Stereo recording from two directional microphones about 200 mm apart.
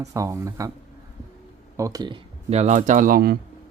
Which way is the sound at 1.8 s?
15° right (ahead or behind).